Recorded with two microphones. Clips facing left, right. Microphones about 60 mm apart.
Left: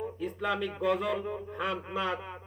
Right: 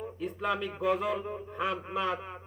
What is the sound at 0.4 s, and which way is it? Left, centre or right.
Speech, left.